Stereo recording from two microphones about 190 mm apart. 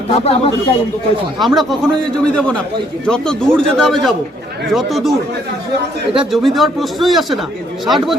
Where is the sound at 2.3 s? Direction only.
5° left (ahead or behind).